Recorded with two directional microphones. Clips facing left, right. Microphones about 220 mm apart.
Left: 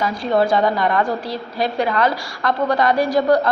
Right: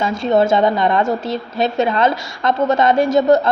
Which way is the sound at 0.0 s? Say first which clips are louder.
Right 3 dB; 25° right (ahead or behind).